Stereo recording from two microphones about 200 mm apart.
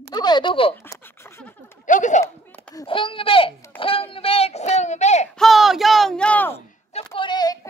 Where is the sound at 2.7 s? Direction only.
25° left (ahead or behind).